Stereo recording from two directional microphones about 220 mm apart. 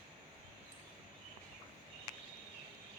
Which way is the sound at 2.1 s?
15° left (ahead or behind).